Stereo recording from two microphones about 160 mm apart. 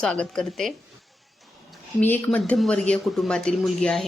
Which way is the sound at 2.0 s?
10° left (ahead or behind).